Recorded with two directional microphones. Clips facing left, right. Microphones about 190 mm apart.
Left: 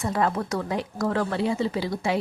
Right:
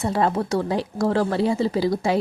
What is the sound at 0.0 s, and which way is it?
Speech, 30° right (ahead or behind).